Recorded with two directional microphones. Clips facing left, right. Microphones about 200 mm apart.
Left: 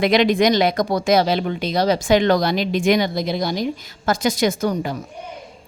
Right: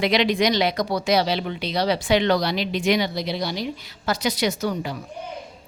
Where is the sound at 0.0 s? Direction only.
50° left (ahead or behind).